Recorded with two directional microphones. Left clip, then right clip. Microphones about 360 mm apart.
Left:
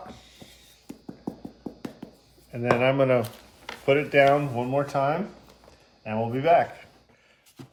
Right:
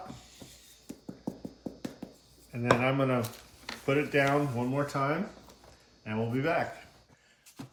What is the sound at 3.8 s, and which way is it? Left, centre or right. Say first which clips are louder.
Speech: left 8 dB; left.